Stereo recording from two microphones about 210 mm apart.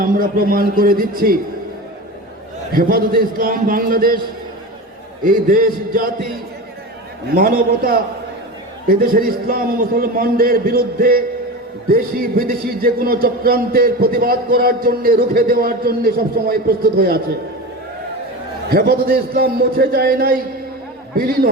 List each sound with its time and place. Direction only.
0.0 s speech: 45° right (ahead or behind)
2.7 s speech: 45° right (ahead or behind)
5.2 s a man's voice: 40° right (ahead or behind)
7.3 s speech: 40° right (ahead or behind)
18.7 s speech: 45° right (ahead or behind)